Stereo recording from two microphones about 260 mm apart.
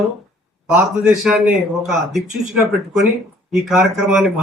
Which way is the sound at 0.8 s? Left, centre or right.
Centre.